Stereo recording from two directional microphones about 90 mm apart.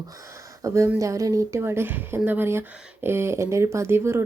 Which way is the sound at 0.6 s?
35° right (ahead or behind).